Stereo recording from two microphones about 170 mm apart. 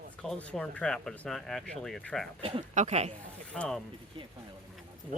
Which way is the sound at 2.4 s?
35° right (ahead or behind).